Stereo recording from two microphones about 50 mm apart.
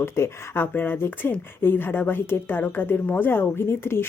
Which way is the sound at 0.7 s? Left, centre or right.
Left.